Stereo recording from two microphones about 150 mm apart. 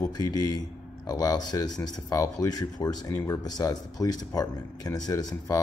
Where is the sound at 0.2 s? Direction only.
25° left (ahead or behind).